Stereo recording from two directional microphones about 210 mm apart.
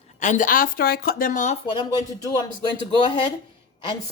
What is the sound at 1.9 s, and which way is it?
Speech, 15° left (ahead or behind).